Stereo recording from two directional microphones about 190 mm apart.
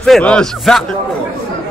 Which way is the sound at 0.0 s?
5° left (ahead or behind).